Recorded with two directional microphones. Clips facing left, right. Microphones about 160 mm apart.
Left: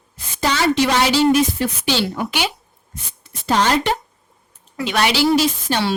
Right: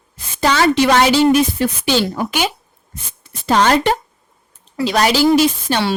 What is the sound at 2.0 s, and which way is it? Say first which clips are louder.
Speech: right 3 dB; 40° right (ahead or behind).